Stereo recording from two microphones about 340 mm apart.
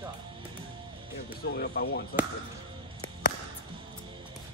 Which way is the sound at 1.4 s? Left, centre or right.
Left.